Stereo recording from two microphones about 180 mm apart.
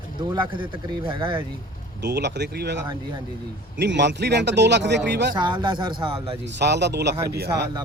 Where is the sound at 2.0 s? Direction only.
70° right (ahead or behind).